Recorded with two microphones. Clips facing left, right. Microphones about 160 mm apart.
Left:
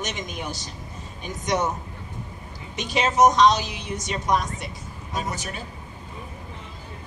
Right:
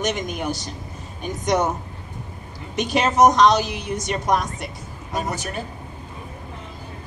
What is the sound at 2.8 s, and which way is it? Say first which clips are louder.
A woman's voice: right 3 dB; 55° right (ahead or behind).